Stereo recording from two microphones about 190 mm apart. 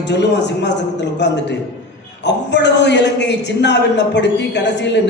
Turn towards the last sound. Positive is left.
turn(degrees=65)  # may be behind; listen again after turning